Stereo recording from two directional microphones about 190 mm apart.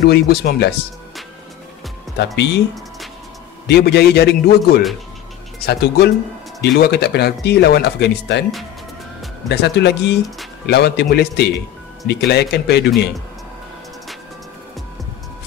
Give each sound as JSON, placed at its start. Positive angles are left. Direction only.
{"t": 0.0, "sound": "speech", "side_deg": 55}
{"t": 2.1, "sound": "speech", "side_deg": 60}
{"t": 3.6, "sound": "speech", "side_deg": 60}
{"t": 9.5, "sound": "speech", "side_deg": 60}